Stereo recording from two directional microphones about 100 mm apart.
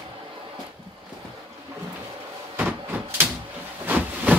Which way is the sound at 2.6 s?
20° right (ahead or behind).